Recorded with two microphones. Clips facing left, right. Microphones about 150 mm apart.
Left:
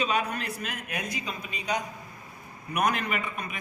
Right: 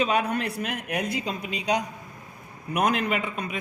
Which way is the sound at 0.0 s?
60° right (ahead or behind).